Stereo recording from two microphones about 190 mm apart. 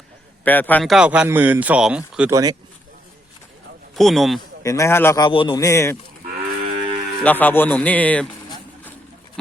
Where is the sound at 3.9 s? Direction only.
Centre (ahead or behind).